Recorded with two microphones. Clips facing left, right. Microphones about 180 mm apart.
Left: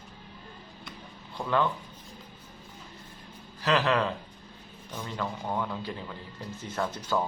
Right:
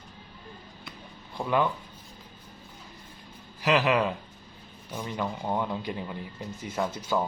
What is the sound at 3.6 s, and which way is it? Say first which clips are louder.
Speech: right 2 dB; 10° right (ahead or behind).